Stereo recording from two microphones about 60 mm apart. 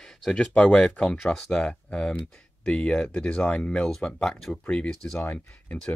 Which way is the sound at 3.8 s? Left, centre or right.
Centre.